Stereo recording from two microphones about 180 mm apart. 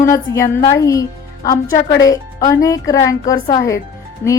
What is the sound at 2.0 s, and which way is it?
A woman's voice, 20° left (ahead or behind).